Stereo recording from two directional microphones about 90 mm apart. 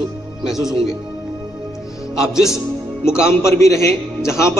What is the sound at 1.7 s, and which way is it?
Music, 5° right (ahead or behind).